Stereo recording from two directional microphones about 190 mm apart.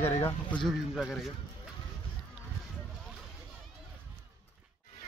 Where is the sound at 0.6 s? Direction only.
Centre (ahead or behind).